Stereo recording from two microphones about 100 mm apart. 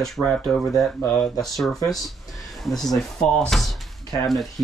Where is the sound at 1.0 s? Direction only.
20° left (ahead or behind).